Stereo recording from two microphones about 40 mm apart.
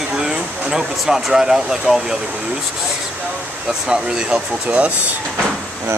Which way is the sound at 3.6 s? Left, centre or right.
Centre.